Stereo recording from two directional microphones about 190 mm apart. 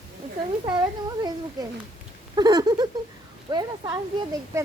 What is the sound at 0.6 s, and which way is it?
Speech, 20° right (ahead or behind).